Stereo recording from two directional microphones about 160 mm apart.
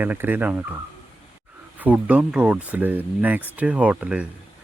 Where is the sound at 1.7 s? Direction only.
10° right (ahead or behind).